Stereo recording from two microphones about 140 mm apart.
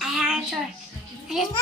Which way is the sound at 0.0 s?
5° right (ahead or behind).